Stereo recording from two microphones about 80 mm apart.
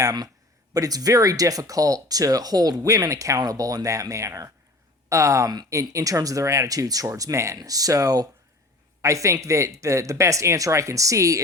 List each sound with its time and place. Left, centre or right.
0.0 s speech: right